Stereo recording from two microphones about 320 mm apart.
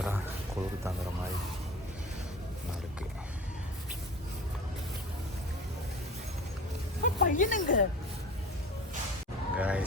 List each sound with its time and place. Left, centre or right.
0.0 s a sound: centre
7.0 s speech: left
9.6 s speech: centre